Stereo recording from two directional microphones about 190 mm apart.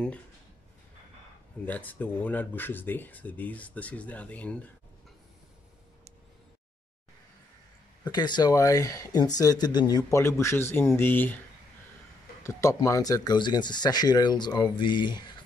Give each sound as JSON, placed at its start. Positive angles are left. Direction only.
{"t": 1.7, "sound": "speech", "side_deg": 10}
{"t": 8.0, "sound": "speech", "side_deg": 20}
{"t": 12.4, "sound": "speech", "side_deg": 15}